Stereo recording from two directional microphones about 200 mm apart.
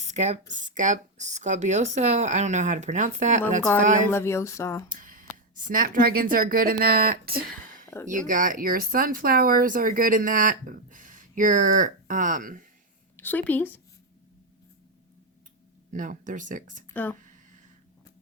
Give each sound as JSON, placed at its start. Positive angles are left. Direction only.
{"t": 0.1, "sound": "speech", "side_deg": -35}
{"t": 4.1, "sound": "speech", "side_deg": 10}
{"t": 4.9, "sound": "speech", "side_deg": -45}
{"t": 13.1, "sound": "a woman's voice", "side_deg": 10}
{"t": 15.9, "sound": "speech", "side_deg": -40}
{"t": 16.9, "sound": "speech", "side_deg": 10}